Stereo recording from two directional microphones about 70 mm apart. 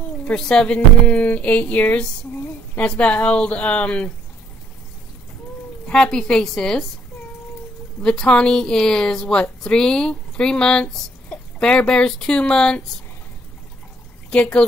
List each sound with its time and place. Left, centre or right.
0.2 s speech: centre
0.7 s music: left
2.9 s a woman's voice: centre
5.9 s a woman's voice: centre
8.0 s a woman's voice: centre
14.3 s speech: centre